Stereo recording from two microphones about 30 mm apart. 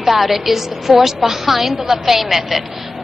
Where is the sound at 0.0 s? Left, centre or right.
Centre.